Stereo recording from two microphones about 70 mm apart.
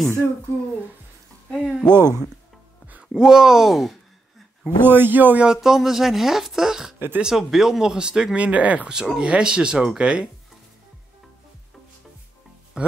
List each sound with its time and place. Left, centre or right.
1.5 s speech: centre
2.0 s speech: right
2.9 s speech: centre
4.6 s speech: right
5.4 s speech: centre
8.9 s speech: centre
12.7 s speech: centre